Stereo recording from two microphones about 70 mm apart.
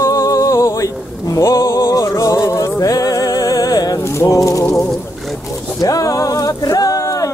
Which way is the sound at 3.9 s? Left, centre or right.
Left.